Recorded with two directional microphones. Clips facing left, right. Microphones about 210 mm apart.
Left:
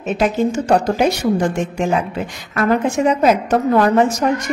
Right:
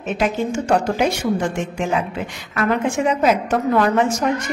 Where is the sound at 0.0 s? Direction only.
35° left (ahead or behind).